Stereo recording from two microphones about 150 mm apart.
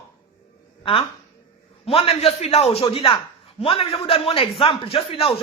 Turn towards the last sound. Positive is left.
turn(degrees=40)  # may be behind; listen again after turning